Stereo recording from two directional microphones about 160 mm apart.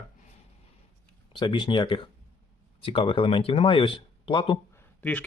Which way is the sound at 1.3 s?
30° left (ahead or behind).